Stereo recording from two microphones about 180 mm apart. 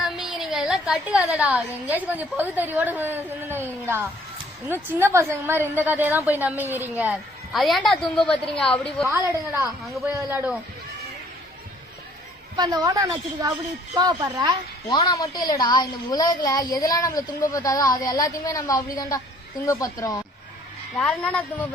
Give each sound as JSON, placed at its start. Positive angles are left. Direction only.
{"t": 0.0, "sound": "a woman's voice", "side_deg": 0}
{"t": 9.0, "sound": "a woman's voice", "side_deg": -15}
{"t": 12.5, "sound": "a woman's voice", "side_deg": -20}
{"t": 14.8, "sound": "a woman's voice", "side_deg": 25}
{"t": 21.0, "sound": "a woman's voice", "side_deg": 5}